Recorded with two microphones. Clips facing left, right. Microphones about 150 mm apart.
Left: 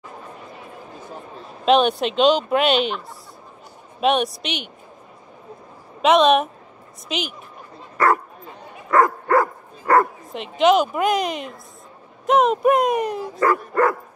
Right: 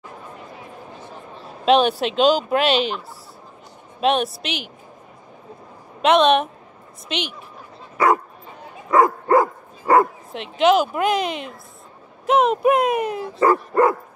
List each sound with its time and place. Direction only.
1.7 s speech: centre (ahead or behind)
4.0 s speech: centre (ahead or behind)
6.0 s speech: centre (ahead or behind)
8.9 s dog: 15° right (ahead or behind)
10.3 s speech: centre (ahead or behind)
13.4 s speech: 25° right (ahead or behind)